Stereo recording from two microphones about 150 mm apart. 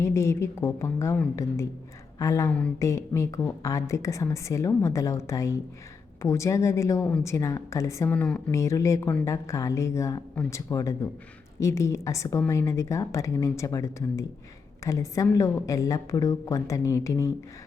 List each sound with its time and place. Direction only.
0.0 s a woman's voice: 20° left (ahead or behind)